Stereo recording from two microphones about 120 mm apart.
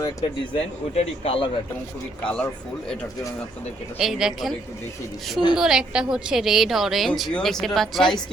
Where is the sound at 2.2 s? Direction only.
10° left (ahead or behind).